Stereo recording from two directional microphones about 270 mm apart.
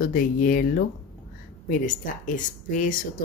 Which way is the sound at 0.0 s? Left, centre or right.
Left.